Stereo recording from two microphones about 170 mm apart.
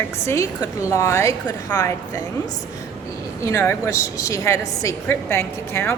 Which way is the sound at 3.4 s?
15° left (ahead or behind).